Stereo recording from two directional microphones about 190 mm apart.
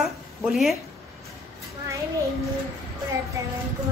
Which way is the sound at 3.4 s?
15° right (ahead or behind).